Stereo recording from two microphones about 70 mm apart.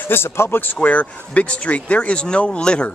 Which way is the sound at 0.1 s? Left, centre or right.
Left.